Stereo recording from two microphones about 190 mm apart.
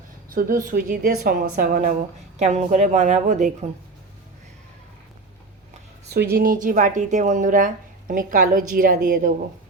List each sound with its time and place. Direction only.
0.3 s a woman's voice: 45° right (ahead or behind)
6.3 s a woman's voice: 45° right (ahead or behind)